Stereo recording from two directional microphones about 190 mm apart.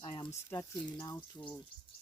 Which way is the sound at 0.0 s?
20° left (ahead or behind).